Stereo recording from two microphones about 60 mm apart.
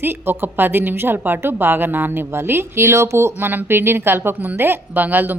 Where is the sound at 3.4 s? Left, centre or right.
Right.